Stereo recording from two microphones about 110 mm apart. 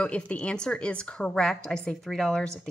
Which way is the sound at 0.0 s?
10° left (ahead or behind).